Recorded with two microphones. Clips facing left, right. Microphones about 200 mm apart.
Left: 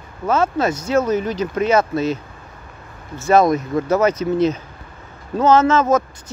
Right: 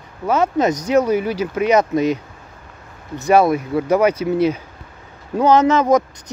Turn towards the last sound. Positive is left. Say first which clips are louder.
# right 1 dB
turn(degrees=-15)  # may be behind; listen again after turning